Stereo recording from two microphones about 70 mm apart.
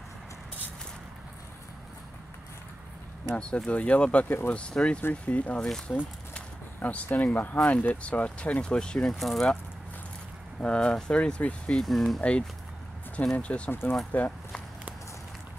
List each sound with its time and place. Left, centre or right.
3.3 s speech: centre; by 4.6 s left
4.6 s speech: centre
5.6 s speech: centre
6.3 s speech: centre
9.2 s speech: centre
10.6 s speech: centre
11.7 s speech: centre
12.2 s speech: centre
13.7 s speech: left